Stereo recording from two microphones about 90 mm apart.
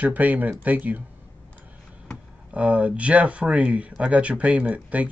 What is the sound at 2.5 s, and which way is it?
Speech, 15° right (ahead or behind).